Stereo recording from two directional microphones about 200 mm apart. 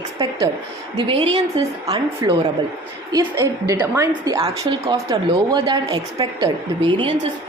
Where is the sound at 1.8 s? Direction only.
15° right (ahead or behind).